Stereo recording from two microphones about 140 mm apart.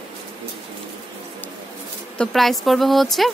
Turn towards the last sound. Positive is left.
turn(degrees=0)  # may be behind; listen again after turning